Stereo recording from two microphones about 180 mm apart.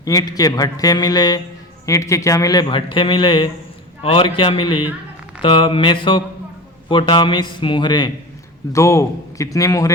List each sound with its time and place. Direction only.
0.0 s a man's voice: 20° left (ahead or behind)